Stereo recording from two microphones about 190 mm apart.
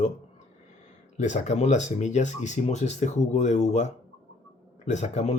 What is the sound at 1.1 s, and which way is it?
Speech, 40° left (ahead or behind).